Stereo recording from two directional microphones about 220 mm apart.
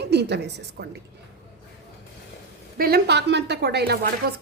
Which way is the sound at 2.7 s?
45° right (ahead or behind).